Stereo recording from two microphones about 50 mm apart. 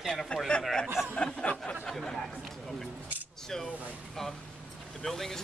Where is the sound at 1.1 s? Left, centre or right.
Left.